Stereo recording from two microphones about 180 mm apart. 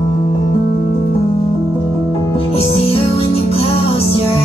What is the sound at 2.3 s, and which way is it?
Music, 30° left (ahead or behind).